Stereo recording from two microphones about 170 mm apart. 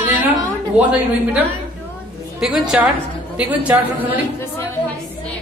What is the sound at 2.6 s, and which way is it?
A woman's voice, 5° right (ahead or behind).